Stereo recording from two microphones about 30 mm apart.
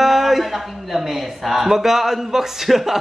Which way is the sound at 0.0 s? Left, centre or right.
Centre.